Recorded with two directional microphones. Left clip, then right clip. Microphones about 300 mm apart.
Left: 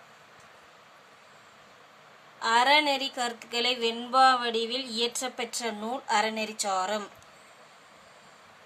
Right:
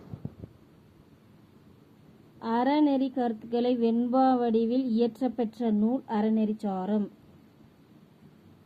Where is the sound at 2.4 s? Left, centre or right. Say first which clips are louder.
Left 4 dB; right.